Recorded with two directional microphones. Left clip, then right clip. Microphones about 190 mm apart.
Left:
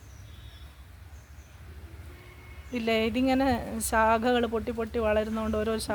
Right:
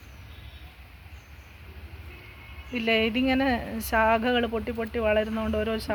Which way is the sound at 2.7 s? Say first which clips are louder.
Right 3 dB; centre (ahead or behind).